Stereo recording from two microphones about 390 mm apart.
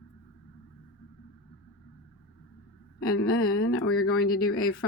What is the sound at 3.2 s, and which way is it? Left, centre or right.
Speech, left.